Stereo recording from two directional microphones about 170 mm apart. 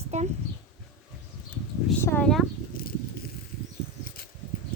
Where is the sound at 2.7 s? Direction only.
60° left (ahead or behind).